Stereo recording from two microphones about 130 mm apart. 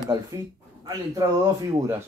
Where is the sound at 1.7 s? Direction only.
20° right (ahead or behind).